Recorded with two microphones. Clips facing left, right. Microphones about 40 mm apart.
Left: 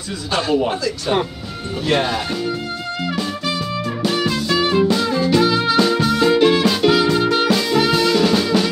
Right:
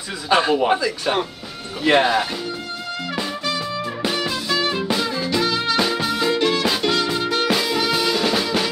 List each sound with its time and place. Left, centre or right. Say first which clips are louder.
0.3 s speech: right 2 dB; centre
3.4 s music: left 2 dB; centre
5.8 s music: left 5 dB; centre
6.3 s music: left 5 dB; centre
7.4 s music: left 3 dB; centre
7.8 s drum kit: left 4 dB; centre